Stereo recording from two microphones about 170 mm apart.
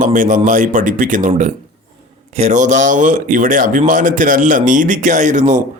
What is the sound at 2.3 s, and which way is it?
Speech, 40° right (ahead or behind).